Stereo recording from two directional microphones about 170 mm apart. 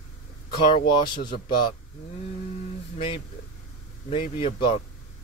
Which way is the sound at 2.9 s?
30° left (ahead or behind).